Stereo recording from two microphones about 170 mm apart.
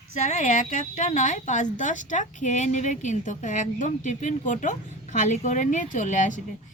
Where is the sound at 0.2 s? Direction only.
45° left (ahead or behind).